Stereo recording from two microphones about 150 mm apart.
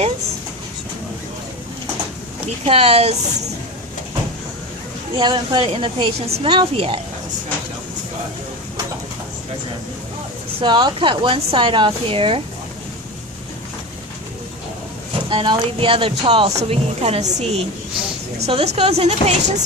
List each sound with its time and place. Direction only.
2.6 s speech: 40° right (ahead or behind)
5.1 s speech: 30° right (ahead or behind)
10.6 s speech: 30° right (ahead or behind)
15.3 s speech: 35° right (ahead or behind)